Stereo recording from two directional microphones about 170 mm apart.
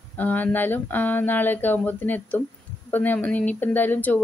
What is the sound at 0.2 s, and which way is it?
A woman's voice, 10° left (ahead or behind).